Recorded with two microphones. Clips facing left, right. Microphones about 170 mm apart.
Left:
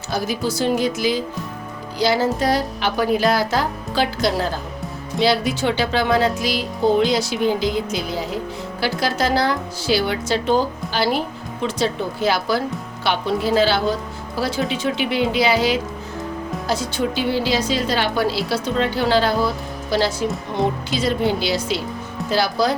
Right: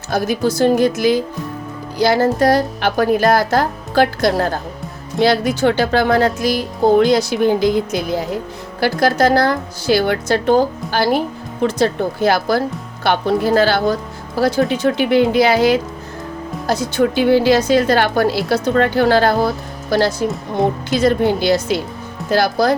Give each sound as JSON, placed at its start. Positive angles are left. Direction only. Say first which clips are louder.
{"t": 0.1, "sound": "a woman's voice", "louder": "right 5 dB", "side_deg": -50}
{"t": 5.1, "sound": "speech", "louder": "right 4 dB", "side_deg": 0}
{"t": 5.5, "sound": "a woman's voice", "louder": "right 5 dB", "side_deg": -50}
{"t": 17.0, "sound": "a woman's voice", "louder": "right 10 dB", "side_deg": -55}